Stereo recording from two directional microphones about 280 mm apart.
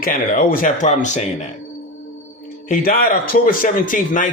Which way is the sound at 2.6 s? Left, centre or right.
Left.